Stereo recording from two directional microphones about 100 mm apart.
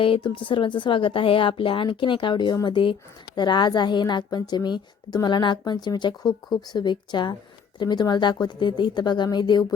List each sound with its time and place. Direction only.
0.0 s a woman's voice: 55° left (ahead or behind)